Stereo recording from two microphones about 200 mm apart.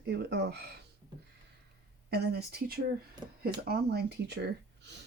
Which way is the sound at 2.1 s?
55° right (ahead or behind).